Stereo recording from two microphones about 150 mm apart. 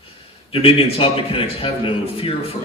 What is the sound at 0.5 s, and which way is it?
A man's voice, 40° left (ahead or behind).